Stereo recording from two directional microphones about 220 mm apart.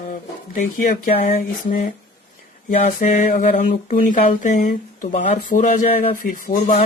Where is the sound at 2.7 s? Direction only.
35° left (ahead or behind).